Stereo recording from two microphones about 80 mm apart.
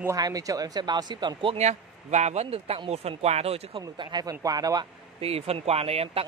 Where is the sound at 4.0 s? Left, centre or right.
Right.